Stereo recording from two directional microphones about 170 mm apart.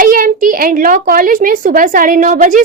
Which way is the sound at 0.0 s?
55° right (ahead or behind).